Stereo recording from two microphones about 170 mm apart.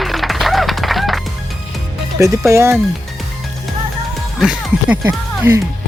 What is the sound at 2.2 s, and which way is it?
Speech, 15° right (ahead or behind).